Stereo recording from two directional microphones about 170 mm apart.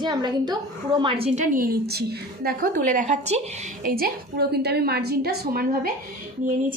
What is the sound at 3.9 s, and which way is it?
A woman's voice, 60° right (ahead or behind).